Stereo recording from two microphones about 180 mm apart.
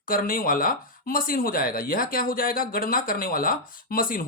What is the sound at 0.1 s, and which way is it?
Speech, 50° left (ahead or behind).